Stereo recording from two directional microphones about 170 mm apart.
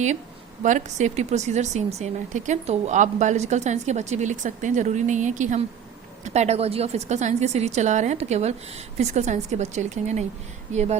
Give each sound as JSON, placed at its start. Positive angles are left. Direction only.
{"t": 0.6, "sound": "a woman's voice", "side_deg": -45}